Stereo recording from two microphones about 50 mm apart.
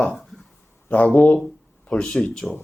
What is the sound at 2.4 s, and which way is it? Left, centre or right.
Speech, centre.